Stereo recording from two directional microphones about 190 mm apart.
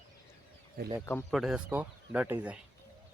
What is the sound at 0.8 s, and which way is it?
Speech, 55° right (ahead or behind).